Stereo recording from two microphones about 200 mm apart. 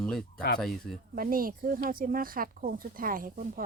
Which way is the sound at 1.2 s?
45° right (ahead or behind).